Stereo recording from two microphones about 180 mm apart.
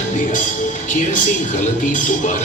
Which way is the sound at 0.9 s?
45° left (ahead or behind).